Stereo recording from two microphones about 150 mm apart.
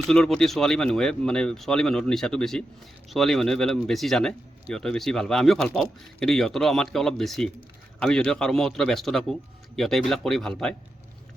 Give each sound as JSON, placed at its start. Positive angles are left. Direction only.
{"t": 0.1, "sound": "speech", "side_deg": 5}